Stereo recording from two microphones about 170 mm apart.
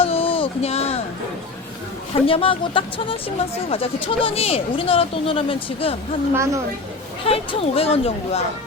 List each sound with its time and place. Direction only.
0.0 s a sound: 35° left (ahead or behind)
2.2 s speech: 30° left (ahead or behind)
6.3 s a woman's voice: 20° right (ahead or behind)
7.3 s speech: 35° left (ahead or behind)